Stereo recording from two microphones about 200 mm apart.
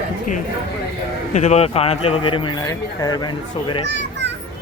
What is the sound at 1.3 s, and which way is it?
Speech, 35° left (ahead or behind).